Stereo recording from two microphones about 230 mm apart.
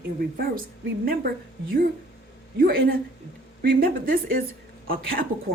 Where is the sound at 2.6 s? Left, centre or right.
Right.